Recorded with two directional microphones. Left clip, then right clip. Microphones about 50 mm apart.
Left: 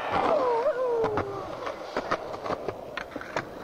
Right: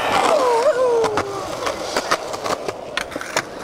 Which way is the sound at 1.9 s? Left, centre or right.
Left.